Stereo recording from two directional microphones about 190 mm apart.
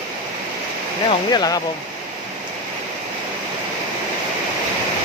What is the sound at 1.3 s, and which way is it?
Speech, 20° left (ahead or behind).